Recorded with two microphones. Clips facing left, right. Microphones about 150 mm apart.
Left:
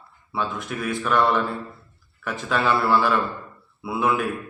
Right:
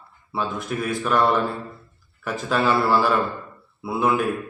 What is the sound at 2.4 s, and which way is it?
A man's voice, 5° right (ahead or behind).